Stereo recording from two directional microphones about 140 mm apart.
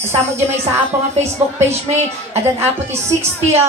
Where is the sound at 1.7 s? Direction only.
50° right (ahead or behind).